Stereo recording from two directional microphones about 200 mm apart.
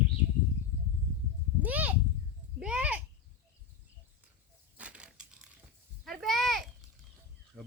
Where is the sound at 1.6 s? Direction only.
10° right (ahead or behind).